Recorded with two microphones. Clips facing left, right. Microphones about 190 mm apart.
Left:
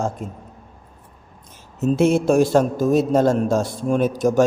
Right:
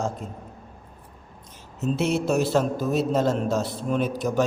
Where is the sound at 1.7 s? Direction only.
50° left (ahead or behind).